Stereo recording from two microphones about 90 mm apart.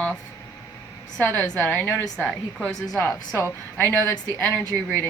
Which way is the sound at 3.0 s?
30° left (ahead or behind).